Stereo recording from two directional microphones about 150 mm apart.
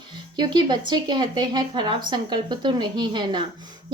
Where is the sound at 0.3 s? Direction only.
30° right (ahead or behind).